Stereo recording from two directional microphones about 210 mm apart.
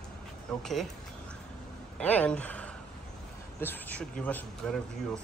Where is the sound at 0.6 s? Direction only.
Centre (ahead or behind).